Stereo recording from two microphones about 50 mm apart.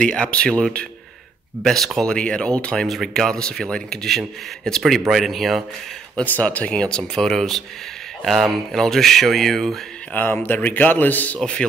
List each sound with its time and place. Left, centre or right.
0.0 s speech: left
2.9 s speech: centre
3.3 s speech: centre
6.2 s speech: left
7.0 s speech: centre
10.1 s speech: left